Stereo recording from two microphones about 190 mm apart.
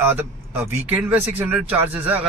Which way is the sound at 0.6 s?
10° right (ahead or behind).